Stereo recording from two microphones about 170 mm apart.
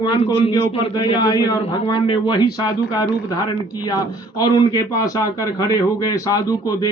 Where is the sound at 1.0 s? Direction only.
25° left (ahead or behind).